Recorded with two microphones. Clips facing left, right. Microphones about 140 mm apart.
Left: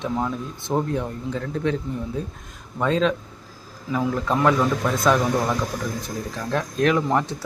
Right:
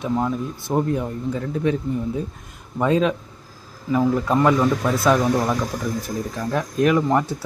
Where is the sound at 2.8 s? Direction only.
10° right (ahead or behind).